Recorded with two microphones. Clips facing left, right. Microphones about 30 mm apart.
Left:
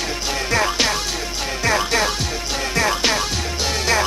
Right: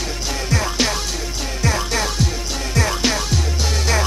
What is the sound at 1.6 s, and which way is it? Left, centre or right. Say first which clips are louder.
Music: left 3 dB; left.